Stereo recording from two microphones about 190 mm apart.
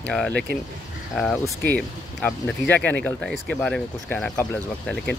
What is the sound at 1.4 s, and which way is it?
Speech, 15° left (ahead or behind).